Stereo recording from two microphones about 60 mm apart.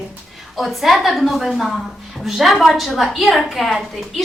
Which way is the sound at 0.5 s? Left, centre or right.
Centre.